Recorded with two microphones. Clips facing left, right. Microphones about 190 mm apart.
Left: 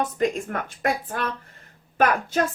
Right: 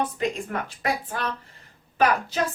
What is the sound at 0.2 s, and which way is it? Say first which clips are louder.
A woman's voice: left 3 dB; 50° left (ahead or behind).